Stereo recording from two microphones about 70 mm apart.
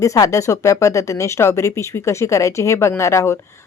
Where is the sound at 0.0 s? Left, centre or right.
Left.